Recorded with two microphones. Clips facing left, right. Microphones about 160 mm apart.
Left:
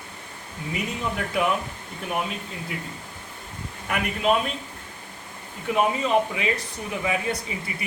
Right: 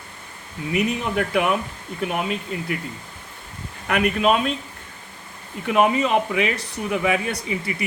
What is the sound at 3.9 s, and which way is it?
Speech, 70° right (ahead or behind).